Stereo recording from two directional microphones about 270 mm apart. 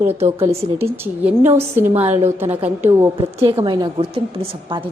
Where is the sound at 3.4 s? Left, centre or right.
Right.